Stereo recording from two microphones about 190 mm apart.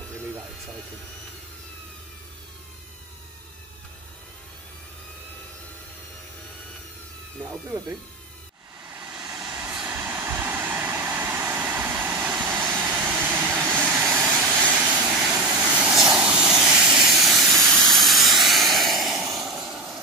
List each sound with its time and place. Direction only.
8.9 s vehicle: 10° right (ahead or behind)
9.2 s vehicle: 20° right (ahead or behind)
9.6 s train: 5° right (ahead or behind)
12.4 s vehicle: 20° right (ahead or behind); by 20.0 s centre (ahead or behind)